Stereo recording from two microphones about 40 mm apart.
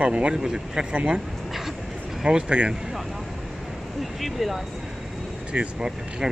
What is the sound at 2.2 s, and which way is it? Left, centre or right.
Speech, centre.